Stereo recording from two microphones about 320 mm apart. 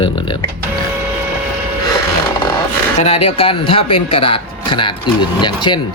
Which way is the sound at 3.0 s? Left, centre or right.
Centre.